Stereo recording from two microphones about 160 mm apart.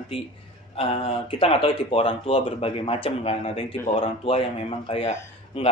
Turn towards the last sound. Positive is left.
turn(degrees=35)  # may be behind; listen again after turning